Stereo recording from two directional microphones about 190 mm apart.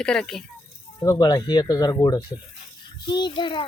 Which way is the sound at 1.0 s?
20° left (ahead or behind).